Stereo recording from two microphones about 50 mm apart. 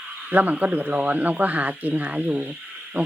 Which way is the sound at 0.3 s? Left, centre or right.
Right.